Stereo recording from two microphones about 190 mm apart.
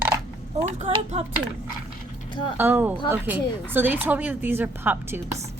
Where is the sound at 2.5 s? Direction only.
10° right (ahead or behind).